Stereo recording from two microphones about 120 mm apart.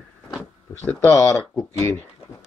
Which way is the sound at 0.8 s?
15° left (ahead or behind).